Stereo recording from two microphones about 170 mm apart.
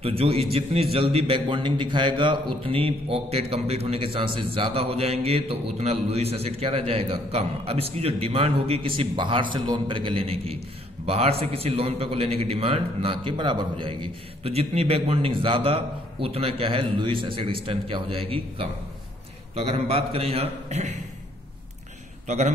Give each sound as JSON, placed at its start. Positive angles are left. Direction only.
{"t": 0.0, "sound": "a man's voice", "side_deg": -35}